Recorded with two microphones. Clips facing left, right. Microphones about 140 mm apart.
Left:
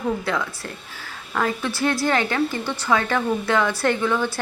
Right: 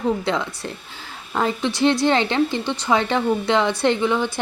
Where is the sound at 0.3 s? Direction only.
25° right (ahead or behind).